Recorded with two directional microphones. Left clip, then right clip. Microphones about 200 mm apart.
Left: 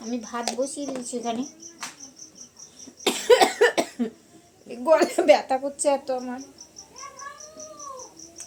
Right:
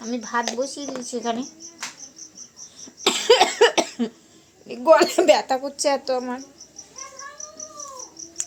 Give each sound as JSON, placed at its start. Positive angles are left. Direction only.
{"t": 0.1, "sound": "speech", "side_deg": -30}
{"t": 3.0, "sound": "cough", "side_deg": -30}
{"t": 4.7, "sound": "a woman's voice", "side_deg": -30}